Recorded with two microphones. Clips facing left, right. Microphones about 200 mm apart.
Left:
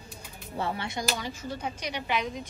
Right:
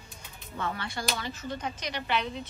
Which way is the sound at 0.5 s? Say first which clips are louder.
Left 3 dB; 30° left (ahead or behind).